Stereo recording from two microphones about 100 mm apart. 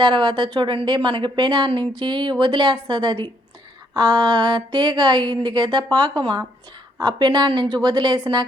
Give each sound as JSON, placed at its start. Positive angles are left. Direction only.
{"t": 0.0, "sound": "speech", "side_deg": -50}